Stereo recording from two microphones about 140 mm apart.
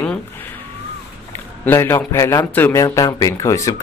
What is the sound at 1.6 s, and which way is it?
Speech, 15° left (ahead or behind).